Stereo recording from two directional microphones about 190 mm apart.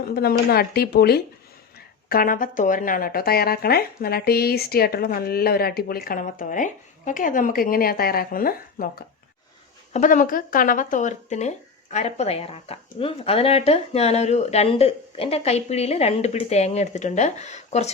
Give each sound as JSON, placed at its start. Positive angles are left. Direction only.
{"t": 0.2, "sound": "speech", "side_deg": 55}